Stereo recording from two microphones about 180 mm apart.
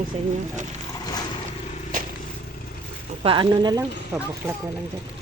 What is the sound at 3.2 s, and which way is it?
Speech, 30° right (ahead or behind).